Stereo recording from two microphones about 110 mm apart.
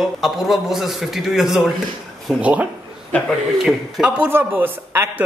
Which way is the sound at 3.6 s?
10° right (ahead or behind).